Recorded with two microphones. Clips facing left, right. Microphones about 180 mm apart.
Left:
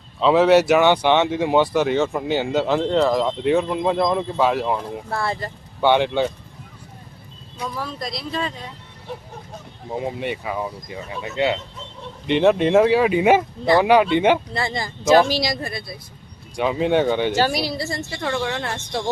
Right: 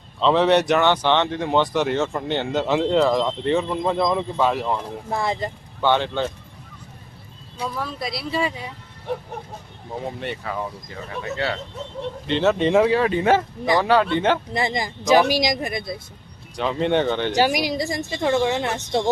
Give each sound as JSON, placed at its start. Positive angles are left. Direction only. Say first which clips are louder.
{"t": 0.2, "sound": "speech", "louder": "left 3 dB", "side_deg": 5}
{"t": 5.0, "sound": "speech", "louder": "right 4 dB", "side_deg": -15}
{"t": 5.8, "sound": "speech", "louder": "left 3 dB", "side_deg": 15}
{"t": 7.8, "sound": "speech", "louder": "right 1 dB", "side_deg": -5}
{"t": 9.1, "sound": "a sound", "louder": "right 6 dB", "side_deg": -60}
{"t": 10.0, "sound": "speech", "louder": "left 3 dB", "side_deg": 10}
{"t": 14.5, "sound": "speech", "louder": "right 2 dB", "side_deg": -15}
{"t": 16.6, "sound": "speech", "louder": "left 2 dB", "side_deg": 5}
{"t": 17.3, "sound": "speech", "louder": "right 1 dB", "side_deg": -15}